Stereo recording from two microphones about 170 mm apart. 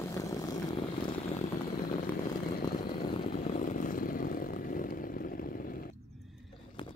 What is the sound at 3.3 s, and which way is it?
Chainsaw, 45° left (ahead or behind).